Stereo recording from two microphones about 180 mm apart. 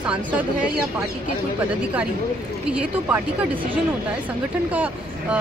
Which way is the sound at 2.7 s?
10° right (ahead or behind).